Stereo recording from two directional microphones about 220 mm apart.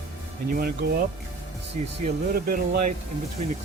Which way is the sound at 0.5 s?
45° right (ahead or behind).